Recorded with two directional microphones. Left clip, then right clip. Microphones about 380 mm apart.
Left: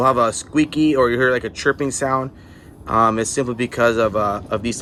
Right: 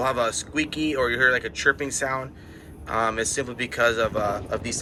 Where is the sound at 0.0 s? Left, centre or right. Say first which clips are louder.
Left 8 dB; left.